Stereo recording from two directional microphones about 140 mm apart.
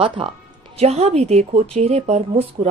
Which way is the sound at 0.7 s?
50° right (ahead or behind).